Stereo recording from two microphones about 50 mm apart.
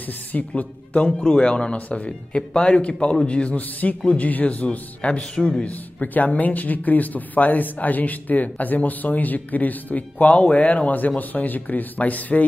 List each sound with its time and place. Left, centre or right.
0.3 s a man's voice: left
4.6 s speech: left